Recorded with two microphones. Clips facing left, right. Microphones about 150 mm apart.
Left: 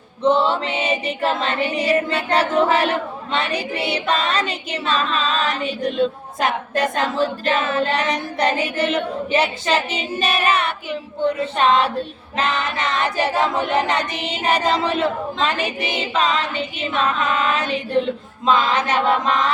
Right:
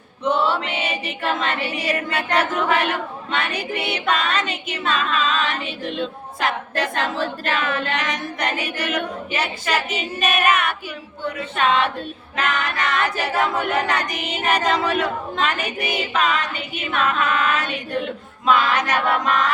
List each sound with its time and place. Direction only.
0.2 s child singing: 30° left (ahead or behind)
6.7 s speech: 45° left (ahead or behind)
7.7 s child singing: 30° left (ahead or behind)
12.4 s a capella: 25° left (ahead or behind)